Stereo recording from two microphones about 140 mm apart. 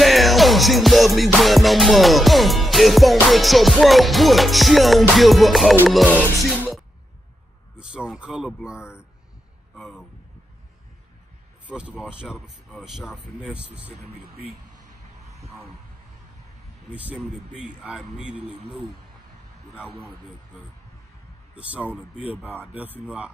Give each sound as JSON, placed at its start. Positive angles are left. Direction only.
{"t": 0.0, "sound": "music", "side_deg": 0}
{"t": 7.7, "sound": "speech", "side_deg": -5}
{"t": 9.8, "sound": "music", "side_deg": 0}
{"t": 11.6, "sound": "speech", "side_deg": -10}
{"t": 14.8, "sound": "a sound", "side_deg": -20}
{"t": 16.9, "sound": "speech", "side_deg": -10}
{"t": 21.5, "sound": "speech", "side_deg": -10}